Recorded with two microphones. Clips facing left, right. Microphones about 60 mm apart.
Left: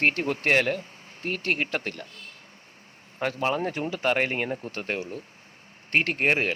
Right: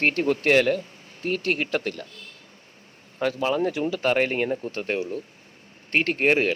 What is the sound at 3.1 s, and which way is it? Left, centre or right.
Speech, left.